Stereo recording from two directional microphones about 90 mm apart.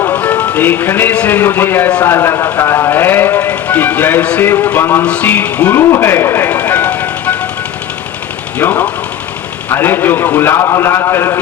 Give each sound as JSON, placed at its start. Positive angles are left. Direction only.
{"t": 0.0, "sound": "a man's voice", "side_deg": 20}
{"t": 5.0, "sound": "music", "side_deg": 15}
{"t": 8.5, "sound": "music", "side_deg": 20}
{"t": 9.6, "sound": "a man's voice", "side_deg": 25}